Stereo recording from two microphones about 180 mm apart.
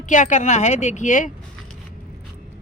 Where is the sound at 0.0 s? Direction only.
45° left (ahead or behind).